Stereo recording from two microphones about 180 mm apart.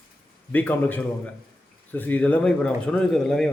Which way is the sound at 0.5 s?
10° left (ahead or behind).